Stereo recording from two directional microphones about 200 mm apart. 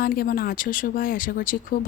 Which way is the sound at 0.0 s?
45° left (ahead or behind).